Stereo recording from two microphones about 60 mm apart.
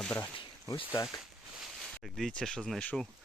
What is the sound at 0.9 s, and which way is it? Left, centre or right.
Speech, left.